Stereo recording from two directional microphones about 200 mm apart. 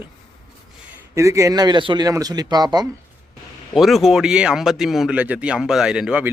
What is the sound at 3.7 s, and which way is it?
Speech, centre (ahead or behind).